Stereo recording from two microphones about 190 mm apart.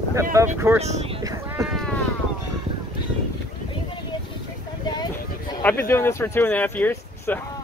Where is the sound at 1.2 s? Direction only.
15° right (ahead or behind).